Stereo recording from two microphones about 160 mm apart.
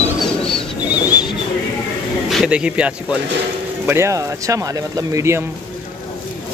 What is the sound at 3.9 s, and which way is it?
Speech, 15° right (ahead or behind).